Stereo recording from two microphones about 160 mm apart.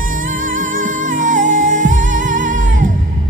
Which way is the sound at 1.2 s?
55° right (ahead or behind).